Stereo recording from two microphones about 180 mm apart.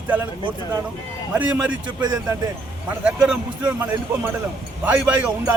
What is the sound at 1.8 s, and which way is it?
Speech, 20° right (ahead or behind).